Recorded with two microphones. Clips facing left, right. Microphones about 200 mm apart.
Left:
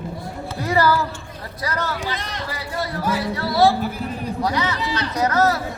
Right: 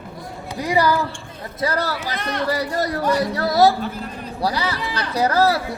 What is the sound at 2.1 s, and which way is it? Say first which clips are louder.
Speech: right 5 dB; 60° right (ahead or behind).